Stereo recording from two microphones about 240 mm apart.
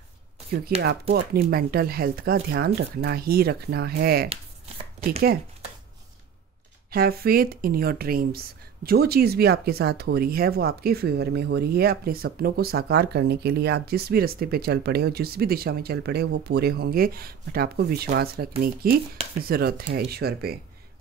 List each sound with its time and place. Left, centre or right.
0.7 s speech: right
6.9 s speech: right